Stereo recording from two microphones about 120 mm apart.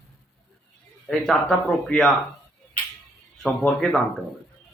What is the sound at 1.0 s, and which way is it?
A man's voice, 5° left (ahead or behind).